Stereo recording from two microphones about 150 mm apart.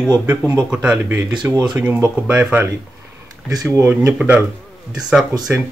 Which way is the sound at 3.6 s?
10° right (ahead or behind).